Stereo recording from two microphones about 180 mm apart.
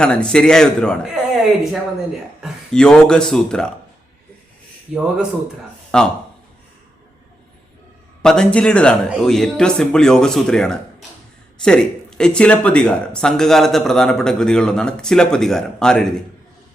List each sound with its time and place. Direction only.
0.0 s speech: 5° left (ahead or behind)
4.9 s speech: 5° right (ahead or behind)
8.2 s speech: 5° left (ahead or behind)